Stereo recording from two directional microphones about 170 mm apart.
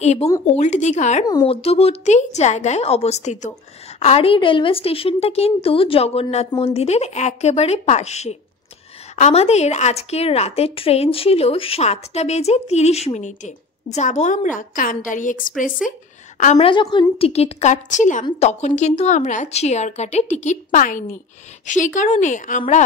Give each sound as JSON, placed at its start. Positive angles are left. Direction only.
{"t": 0.0, "sound": "a woman's voice", "side_deg": 40}
{"t": 1.2, "sound": "a woman's voice", "side_deg": 30}
{"t": 16.5, "sound": "a woman's voice", "side_deg": 30}